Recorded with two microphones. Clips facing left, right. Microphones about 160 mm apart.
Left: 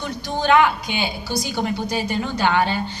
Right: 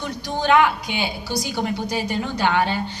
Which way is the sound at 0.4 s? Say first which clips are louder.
Left 1 dB; 15° right (ahead or behind).